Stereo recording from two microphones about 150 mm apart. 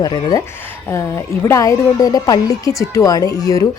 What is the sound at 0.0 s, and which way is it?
A woman's voice, 25° left (ahead or behind).